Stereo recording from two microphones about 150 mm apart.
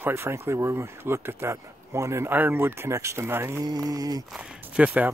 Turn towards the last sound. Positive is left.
turn(degrees=-10)  # may be behind; listen again after turning